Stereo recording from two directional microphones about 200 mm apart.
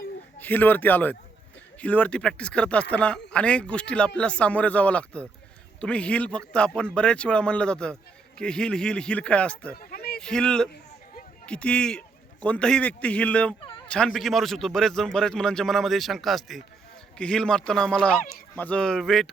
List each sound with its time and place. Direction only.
0.3 s speech: 10° left (ahead or behind)
9.7 s a sound: 50° left (ahead or behind)
10.2 s speech: 5° left (ahead or behind)
13.6 s fowl: 25° left (ahead or behind)
13.8 s speech: 5° left (ahead or behind)